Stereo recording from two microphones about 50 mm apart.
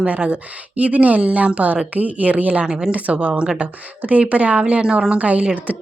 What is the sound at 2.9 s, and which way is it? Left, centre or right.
A woman's voice, right.